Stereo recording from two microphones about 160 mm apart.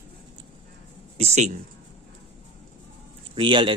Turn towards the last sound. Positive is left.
turn(degrees=-30)  # may be behind; listen again after turning